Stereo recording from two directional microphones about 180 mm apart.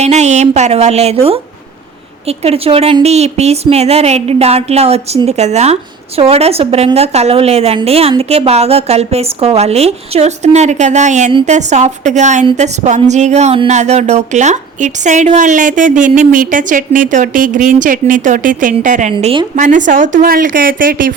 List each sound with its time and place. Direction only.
0.0 s a woman's voice: 40° right (ahead or behind)
19.1 s a woman's voice: 25° right (ahead or behind)
19.5 s a woman's voice: 45° right (ahead or behind)